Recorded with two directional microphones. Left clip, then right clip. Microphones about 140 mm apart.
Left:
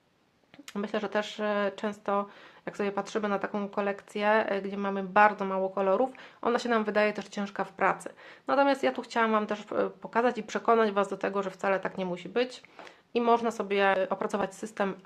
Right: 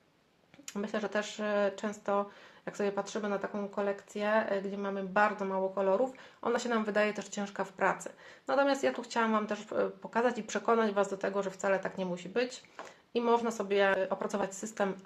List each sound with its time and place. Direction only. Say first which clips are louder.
0.6 s speech: left 3 dB; 30° left (ahead or behind)